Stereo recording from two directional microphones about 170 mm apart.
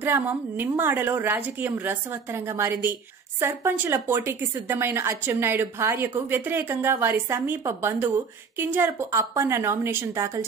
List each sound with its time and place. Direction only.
0.0 s a woman's voice: 10° right (ahead or behind)